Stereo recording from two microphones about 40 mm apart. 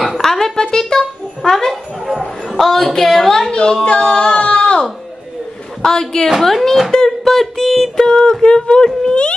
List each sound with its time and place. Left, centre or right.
0.1 s a child's voice: centre
5.8 s a woman's voice: centre
7.1 s a sound: centre
8.1 s speech: centre